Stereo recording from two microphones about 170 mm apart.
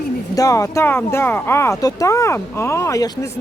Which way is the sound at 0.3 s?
20° left (ahead or behind).